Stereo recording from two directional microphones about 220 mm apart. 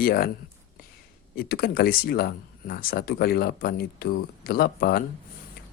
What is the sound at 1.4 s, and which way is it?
Speech, 45° left (ahead or behind).